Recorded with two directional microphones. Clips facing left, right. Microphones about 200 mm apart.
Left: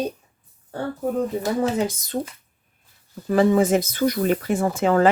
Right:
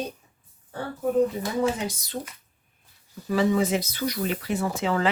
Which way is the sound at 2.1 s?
40° left (ahead or behind).